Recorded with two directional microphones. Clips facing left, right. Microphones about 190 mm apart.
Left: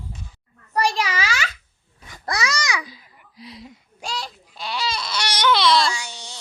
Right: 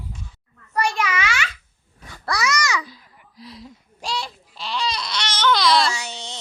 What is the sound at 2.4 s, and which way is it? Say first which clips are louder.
Babbling: right 2 dB; 30° left (ahead or behind).